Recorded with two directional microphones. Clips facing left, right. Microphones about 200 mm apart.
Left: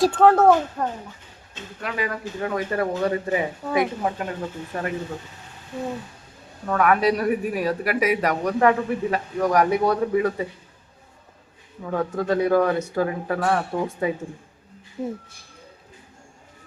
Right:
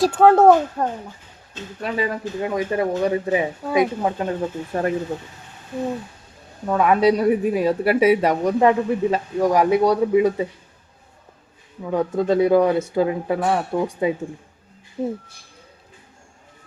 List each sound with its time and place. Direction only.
0.0 s speech: 10° right (ahead or behind)
0.8 s speech: 30° right (ahead or behind)
4.2 s speech: 35° right (ahead or behind)
6.7 s speech: 20° right (ahead or behind)
11.8 s speech: 15° right (ahead or behind)
15.0 s speech: 30° right (ahead or behind)